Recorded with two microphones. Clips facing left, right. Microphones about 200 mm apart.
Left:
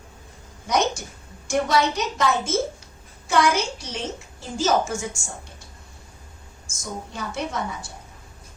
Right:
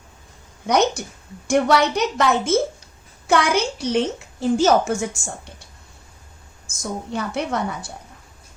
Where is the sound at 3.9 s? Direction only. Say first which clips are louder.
Right 10 dB; 65° right (ahead or behind).